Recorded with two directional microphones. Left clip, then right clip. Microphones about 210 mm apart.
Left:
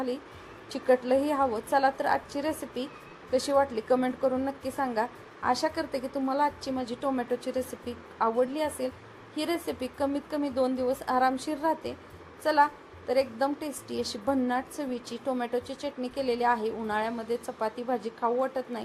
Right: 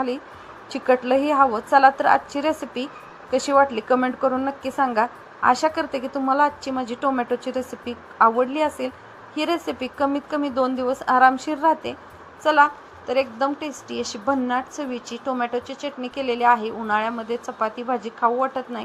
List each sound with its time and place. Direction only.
0.7 s a woman's voice: 10° right (ahead or behind)